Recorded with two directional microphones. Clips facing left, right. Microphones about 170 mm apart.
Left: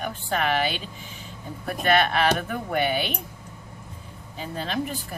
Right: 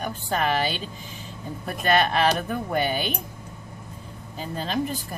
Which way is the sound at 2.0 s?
35° right (ahead or behind).